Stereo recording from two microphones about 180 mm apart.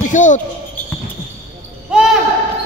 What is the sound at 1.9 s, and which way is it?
Basketball bounce, 5° right (ahead or behind).